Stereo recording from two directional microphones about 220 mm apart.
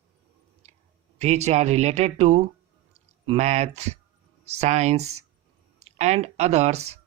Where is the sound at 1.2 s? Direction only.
30° right (ahead or behind).